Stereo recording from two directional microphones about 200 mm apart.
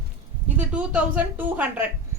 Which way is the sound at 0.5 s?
5° right (ahead or behind).